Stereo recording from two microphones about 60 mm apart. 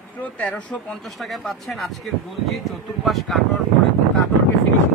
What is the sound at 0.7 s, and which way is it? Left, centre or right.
Speech, centre.